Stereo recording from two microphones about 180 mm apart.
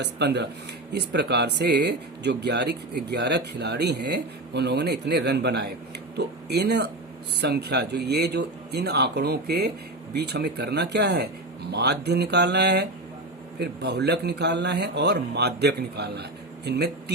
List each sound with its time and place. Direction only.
0.0 s speech: 70° right (ahead or behind)